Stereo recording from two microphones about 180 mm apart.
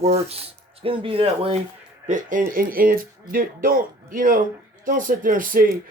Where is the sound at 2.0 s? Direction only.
45° right (ahead or behind).